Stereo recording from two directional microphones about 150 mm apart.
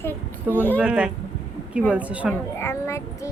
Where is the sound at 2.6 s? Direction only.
15° left (ahead or behind).